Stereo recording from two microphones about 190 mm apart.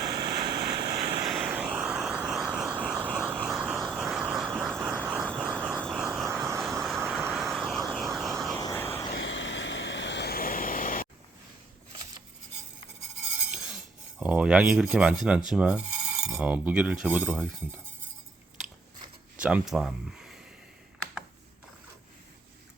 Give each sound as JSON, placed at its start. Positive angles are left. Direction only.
{"t": 0.0, "sound": "vehicle", "side_deg": -20}
{"t": 1.3, "sound": "vehicle", "side_deg": -5}
{"t": 8.5, "sound": "vehicle", "side_deg": 15}
{"t": 9.2, "sound": "vehicle", "side_deg": 75}
{"t": 13.5, "sound": "cutlery", "side_deg": 0}
{"t": 14.2, "sound": "speech", "side_deg": -5}
{"t": 19.4, "sound": "speech", "side_deg": -5}